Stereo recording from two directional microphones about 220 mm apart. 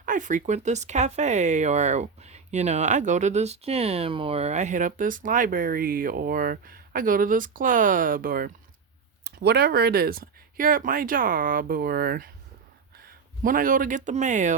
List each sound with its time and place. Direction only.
0.0 s speech: 35° right (ahead or behind)
13.4 s speech: 40° right (ahead or behind)